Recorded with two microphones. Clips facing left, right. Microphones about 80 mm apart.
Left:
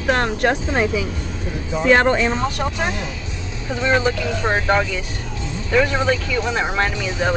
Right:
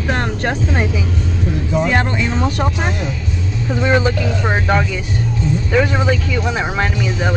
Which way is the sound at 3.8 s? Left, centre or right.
Centre.